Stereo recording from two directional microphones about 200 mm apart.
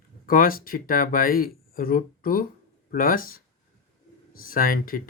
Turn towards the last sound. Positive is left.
turn(degrees=45)  # may be behind; listen again after turning